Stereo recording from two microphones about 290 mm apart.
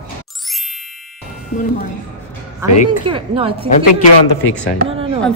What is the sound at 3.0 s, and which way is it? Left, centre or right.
Speech, centre.